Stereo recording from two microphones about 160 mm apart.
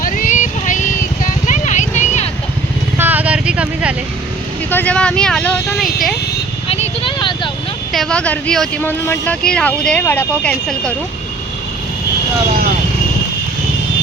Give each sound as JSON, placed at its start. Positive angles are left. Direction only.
{"t": 0.0, "sound": "vehicle", "side_deg": 55}
{"t": 3.0, "sound": "vehicle", "side_deg": -10}
{"t": 4.7, "sound": "speech", "side_deg": 10}
{"t": 6.7, "sound": "a sound", "side_deg": 40}
{"t": 7.9, "sound": "speech", "side_deg": 5}